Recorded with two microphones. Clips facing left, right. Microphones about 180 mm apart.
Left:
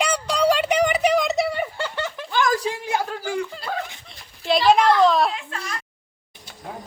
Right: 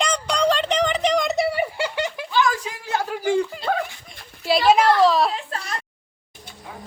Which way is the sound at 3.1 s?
15° right (ahead or behind).